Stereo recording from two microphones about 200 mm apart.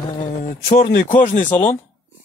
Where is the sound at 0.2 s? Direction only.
45° left (ahead or behind).